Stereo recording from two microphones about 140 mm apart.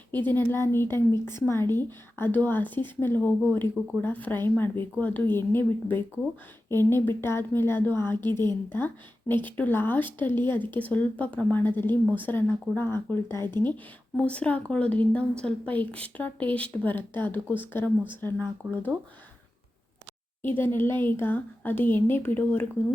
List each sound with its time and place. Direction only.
0.1 s a woman's voice: 15° left (ahead or behind)
9.3 s a woman's voice: 15° left (ahead or behind)
20.6 s a woman's voice: 15° left (ahead or behind)